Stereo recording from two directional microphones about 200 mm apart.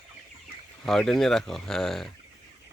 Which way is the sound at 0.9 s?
Centre (ahead or behind).